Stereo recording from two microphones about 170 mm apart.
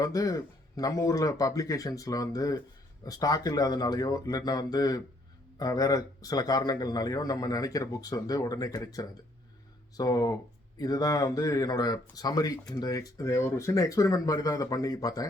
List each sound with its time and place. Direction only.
0.0 s a man's voice: 20° left (ahead or behind)